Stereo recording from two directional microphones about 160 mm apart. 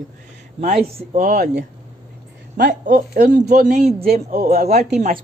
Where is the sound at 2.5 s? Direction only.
75° right (ahead or behind).